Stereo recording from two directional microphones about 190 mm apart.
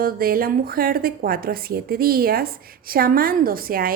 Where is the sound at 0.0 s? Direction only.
50° right (ahead or behind).